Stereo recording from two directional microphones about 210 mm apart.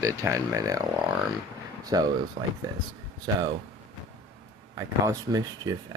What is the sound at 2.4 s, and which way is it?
Speech, 35° right (ahead or behind).